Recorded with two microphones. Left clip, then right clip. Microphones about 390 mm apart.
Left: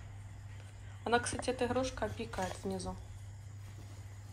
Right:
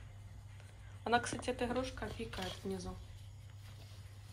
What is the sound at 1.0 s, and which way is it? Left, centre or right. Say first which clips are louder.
A woman's voice: left 2 dB; centre.